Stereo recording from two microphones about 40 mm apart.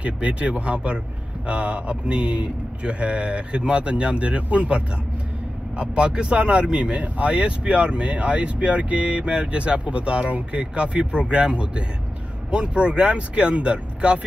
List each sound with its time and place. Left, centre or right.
0.0 s a man's voice: right